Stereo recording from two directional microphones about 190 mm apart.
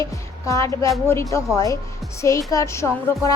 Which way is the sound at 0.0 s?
15° left (ahead or behind).